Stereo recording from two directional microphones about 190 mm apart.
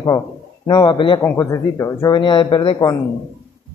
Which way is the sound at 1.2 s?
15° left (ahead or behind).